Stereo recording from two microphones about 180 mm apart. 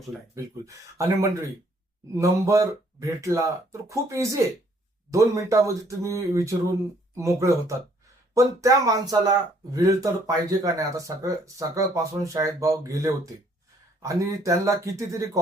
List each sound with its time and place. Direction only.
0.3 s speech: 15° right (ahead or behind)